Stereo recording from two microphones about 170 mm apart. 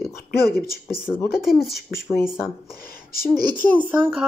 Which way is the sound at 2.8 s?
60° left (ahead or behind).